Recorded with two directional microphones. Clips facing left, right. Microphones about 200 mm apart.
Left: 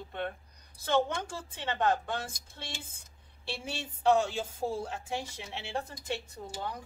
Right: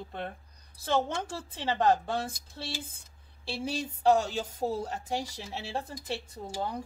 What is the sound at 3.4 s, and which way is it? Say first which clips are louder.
A woman's voice: right 5 dB; 35° right (ahead or behind).